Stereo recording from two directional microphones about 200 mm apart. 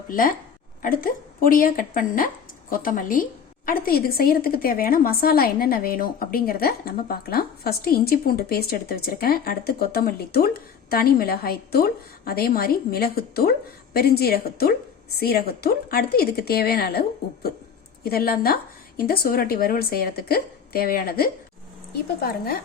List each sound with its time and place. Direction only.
0.1 s a woman's voice: 45° left (ahead or behind)
18.0 s a woman's voice: 50° left (ahead or behind)